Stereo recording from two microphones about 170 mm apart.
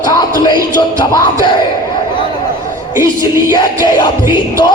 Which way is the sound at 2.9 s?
15° right (ahead or behind).